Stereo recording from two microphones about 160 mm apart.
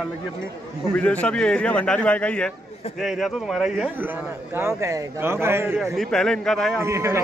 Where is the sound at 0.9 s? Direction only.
10° left (ahead or behind).